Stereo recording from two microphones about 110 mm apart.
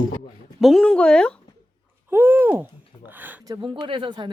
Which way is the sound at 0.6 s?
Centre (ahead or behind).